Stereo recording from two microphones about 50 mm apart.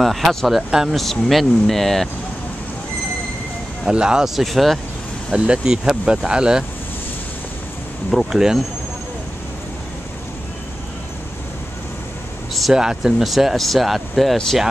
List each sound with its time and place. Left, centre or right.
0.0 s speech: centre
0.5 s speech: centre
0.9 s speech: centre
3.9 s speech: centre
4.4 s speech: centre
5.3 s speech: centre
8.1 s speech: centre
12.7 s speech: centre